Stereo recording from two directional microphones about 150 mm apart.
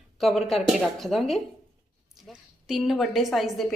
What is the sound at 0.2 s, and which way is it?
A woman's voice, centre (ahead or behind).